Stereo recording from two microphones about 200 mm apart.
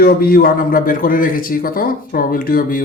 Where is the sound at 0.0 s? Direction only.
50° left (ahead or behind).